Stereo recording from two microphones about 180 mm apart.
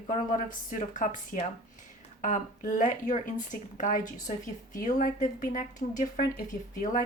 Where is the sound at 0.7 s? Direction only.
45° left (ahead or behind).